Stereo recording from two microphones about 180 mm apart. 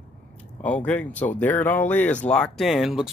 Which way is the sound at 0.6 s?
5° left (ahead or behind).